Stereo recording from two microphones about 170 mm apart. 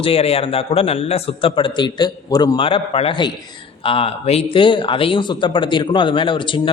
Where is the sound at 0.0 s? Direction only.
35° left (ahead or behind).